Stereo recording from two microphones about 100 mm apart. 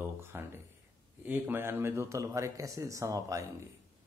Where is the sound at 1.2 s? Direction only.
20° right (ahead or behind).